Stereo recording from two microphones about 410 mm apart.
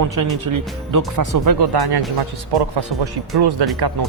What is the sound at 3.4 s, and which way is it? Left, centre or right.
Speech, right.